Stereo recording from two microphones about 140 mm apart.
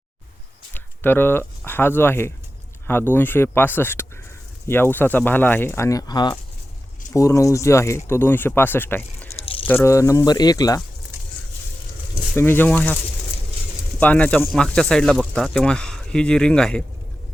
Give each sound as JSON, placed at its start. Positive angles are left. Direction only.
{"t": 0.7, "sound": "speech", "side_deg": 15}
{"t": 12.4, "sound": "speech", "side_deg": 15}
{"t": 14.0, "sound": "speech", "side_deg": 10}